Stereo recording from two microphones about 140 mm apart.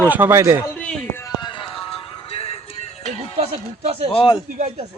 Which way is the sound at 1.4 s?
35° left (ahead or behind).